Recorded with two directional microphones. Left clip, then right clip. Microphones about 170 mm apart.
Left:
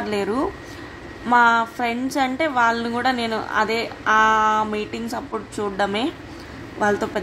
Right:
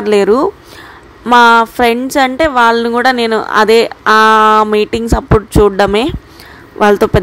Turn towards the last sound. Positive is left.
turn(degrees=-50)  # may be behind; listen again after turning